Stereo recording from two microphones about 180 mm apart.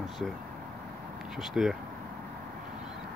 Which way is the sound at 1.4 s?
Centre (ahead or behind).